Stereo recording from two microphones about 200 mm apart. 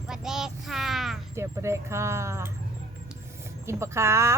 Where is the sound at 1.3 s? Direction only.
15° right (ahead or behind).